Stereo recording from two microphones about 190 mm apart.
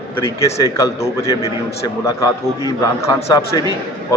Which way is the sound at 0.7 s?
15° left (ahead or behind).